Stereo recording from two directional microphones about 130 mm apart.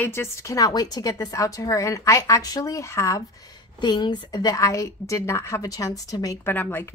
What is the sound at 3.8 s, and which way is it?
A woman's voice, 35° left (ahead or behind).